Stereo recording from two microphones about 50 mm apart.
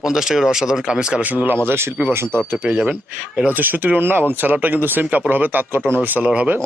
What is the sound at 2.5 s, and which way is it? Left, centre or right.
Speech, right.